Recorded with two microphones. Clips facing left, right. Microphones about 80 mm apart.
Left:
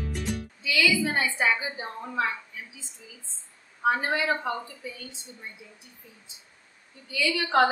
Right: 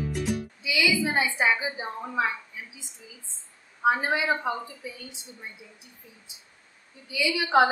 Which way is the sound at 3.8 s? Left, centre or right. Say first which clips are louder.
Right 1 dB; centre.